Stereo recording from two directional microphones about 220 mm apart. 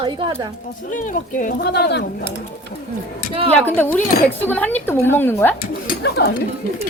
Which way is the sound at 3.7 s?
10° left (ahead or behind).